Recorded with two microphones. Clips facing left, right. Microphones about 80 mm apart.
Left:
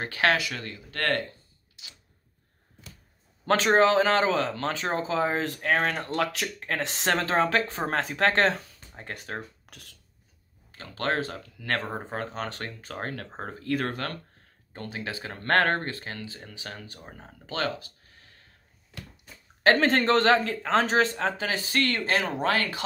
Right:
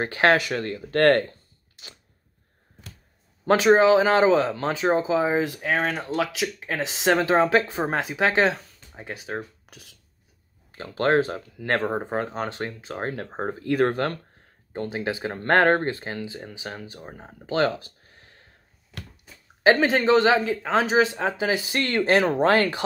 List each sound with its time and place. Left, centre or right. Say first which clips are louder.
0.0 s speech: right 5 dB; right
3.4 s speech: right 4 dB; centre
10.7 s speech: right 7 dB; right
19.2 s speech: right 3 dB; centre; by 22.8 s right